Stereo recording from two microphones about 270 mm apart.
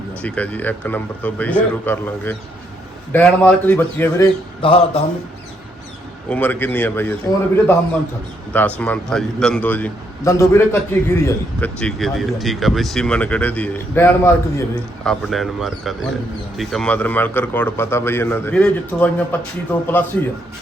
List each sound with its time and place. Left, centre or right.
0.2 s a man's voice: centre
4.6 s speech: centre
6.2 s a man's voice: centre